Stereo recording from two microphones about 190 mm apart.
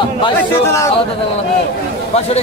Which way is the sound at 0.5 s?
15° left (ahead or behind).